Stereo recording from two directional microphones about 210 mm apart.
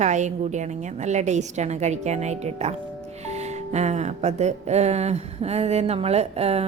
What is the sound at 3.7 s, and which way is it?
A woman's voice, 30° right (ahead or behind).